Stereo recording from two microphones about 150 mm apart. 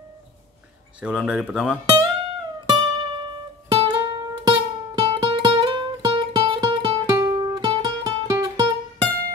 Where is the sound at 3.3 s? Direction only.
35° right (ahead or behind).